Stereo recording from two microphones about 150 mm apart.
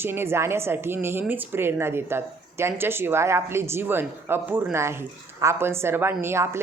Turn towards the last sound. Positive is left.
turn(degrees=-15)  # may be behind; listen again after turning